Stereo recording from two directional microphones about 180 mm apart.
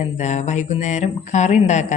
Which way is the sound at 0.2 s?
40° left (ahead or behind).